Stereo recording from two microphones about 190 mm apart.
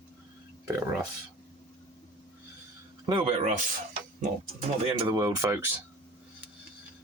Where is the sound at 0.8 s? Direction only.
5° right (ahead or behind).